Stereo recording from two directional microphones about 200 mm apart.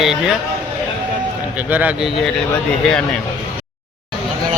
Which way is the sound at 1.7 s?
5° right (ahead or behind).